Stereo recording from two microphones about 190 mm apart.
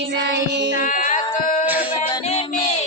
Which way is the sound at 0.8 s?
45° left (ahead or behind).